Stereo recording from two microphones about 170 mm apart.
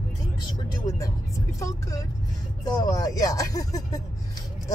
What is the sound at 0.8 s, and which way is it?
Speech, 20° left (ahead or behind).